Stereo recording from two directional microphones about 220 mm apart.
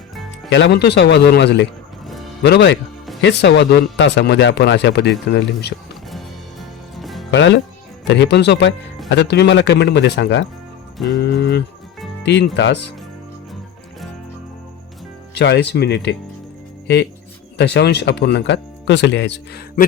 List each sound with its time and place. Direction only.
0.5 s speech: 50° left (ahead or behind)
6.1 s music: centre (ahead or behind)
7.3 s speech: 55° left (ahead or behind)
15.4 s speech: 50° left (ahead or behind)